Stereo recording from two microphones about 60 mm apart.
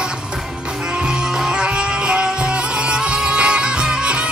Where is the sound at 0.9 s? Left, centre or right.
Centre.